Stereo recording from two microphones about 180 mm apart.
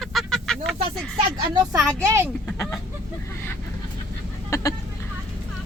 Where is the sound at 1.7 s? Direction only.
15° right (ahead or behind).